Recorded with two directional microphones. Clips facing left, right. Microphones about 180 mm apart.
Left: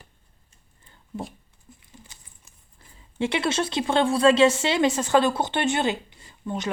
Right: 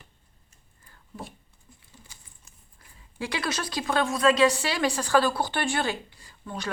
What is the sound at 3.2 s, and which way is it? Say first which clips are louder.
Speech: left 6 dB; 25° left (ahead or behind).